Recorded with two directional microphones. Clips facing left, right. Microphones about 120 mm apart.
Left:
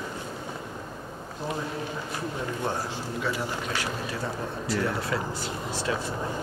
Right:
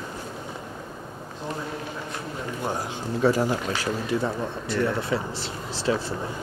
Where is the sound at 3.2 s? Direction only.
40° right (ahead or behind).